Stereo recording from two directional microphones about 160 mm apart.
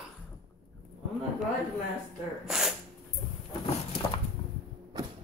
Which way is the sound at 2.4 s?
5° right (ahead or behind).